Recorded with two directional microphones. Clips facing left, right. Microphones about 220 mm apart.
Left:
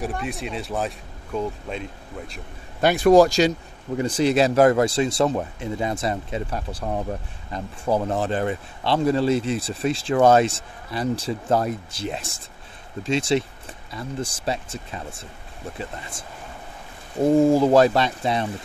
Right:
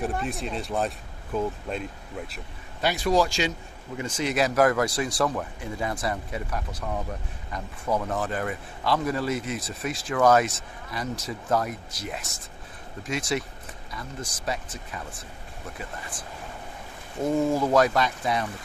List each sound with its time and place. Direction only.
0.0 s speech: centre (ahead or behind)
2.8 s speech: 50° left (ahead or behind); by 18.5 s 25° left (ahead or behind)